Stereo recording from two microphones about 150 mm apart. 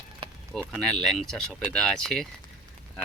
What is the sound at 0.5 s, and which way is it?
Speech, centre (ahead or behind).